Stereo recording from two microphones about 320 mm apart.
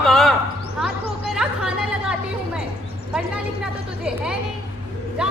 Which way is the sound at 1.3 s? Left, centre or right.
Centre.